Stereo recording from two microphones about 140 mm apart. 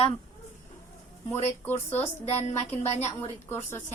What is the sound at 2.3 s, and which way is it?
Speech, 50° left (ahead or behind).